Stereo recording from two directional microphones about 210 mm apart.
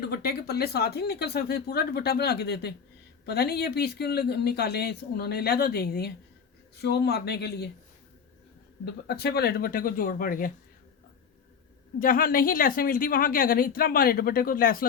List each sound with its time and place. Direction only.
0.1 s speech: 50° left (ahead or behind)
8.8 s speech: 50° left (ahead or behind)
11.9 s speech: 45° left (ahead or behind)